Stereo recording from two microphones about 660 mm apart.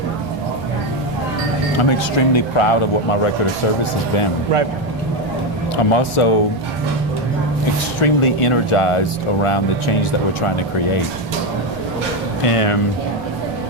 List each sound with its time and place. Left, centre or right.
1.8 s speech: left
5.9 s speech: left
8.0 s speech: left
12.5 s speech: left